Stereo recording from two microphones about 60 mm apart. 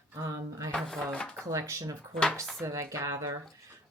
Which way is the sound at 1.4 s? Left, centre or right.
Right.